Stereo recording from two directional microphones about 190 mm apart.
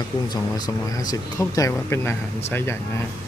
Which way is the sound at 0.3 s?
20° left (ahead or behind).